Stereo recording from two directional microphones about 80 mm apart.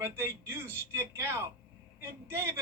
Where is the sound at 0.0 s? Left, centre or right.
Right.